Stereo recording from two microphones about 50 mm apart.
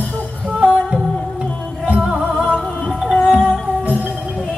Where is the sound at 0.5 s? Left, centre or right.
Right.